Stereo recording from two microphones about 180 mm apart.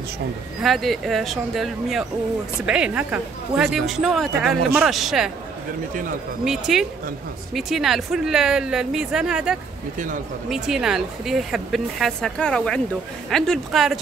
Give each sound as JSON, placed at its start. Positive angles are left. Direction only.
{"t": 0.6, "sound": "speech", "side_deg": 0}
{"t": 6.4, "sound": "speech", "side_deg": 0}
{"t": 9.9, "sound": "speech", "side_deg": -45}
{"t": 10.5, "sound": "speech", "side_deg": -5}